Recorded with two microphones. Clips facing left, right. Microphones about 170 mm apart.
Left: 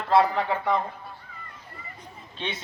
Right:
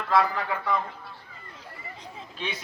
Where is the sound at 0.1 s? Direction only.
30° left (ahead or behind).